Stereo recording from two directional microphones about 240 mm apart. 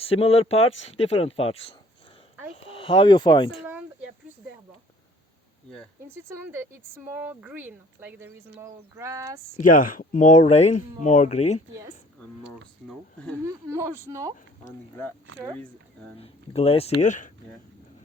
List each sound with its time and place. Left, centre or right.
0.1 s speech: left
3.7 s a sound: centre
6.1 s speech: centre
9.6 s speech: left
12.5 s speech: centre
13.4 s speech: centre
16.1 s speech: left